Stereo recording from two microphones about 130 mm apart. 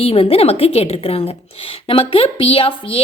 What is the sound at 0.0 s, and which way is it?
A woman's voice, 50° left (ahead or behind).